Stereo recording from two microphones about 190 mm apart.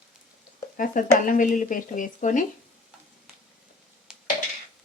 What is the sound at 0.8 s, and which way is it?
Speech, 45° left (ahead or behind).